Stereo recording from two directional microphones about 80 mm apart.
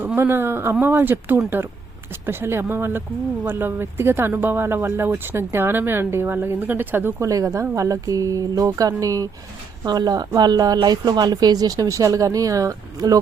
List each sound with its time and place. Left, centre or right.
0.2 s speech: right
7.2 s speech: right
9.8 s a woman's voice: right